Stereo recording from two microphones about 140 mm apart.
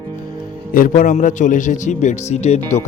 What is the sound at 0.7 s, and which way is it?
A man's voice, 80° left.